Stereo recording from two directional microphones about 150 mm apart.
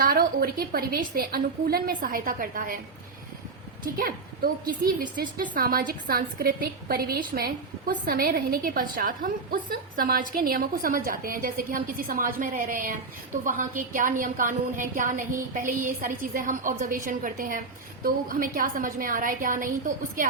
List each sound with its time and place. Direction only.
0.0 s a woman's voice: 85° right; by 2.7 s 65° right (ahead or behind)
3.9 s a woman's voice: 75° right (ahead or behind)